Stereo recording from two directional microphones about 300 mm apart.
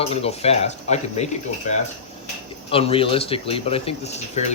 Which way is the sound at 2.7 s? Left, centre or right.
Centre.